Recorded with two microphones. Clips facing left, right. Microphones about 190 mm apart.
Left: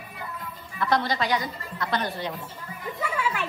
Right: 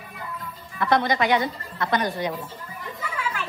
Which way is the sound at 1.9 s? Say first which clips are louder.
Right 4 dB; 15° right (ahead or behind).